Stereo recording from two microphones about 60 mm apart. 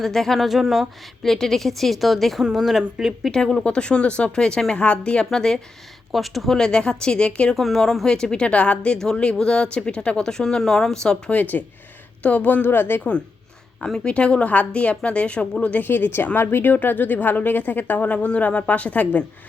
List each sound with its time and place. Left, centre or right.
0.0 s a woman's voice: centre
3.3 s speech: centre
7.5 s speech: centre
11.3 s a woman's voice: left
13.8 s a woman's voice: centre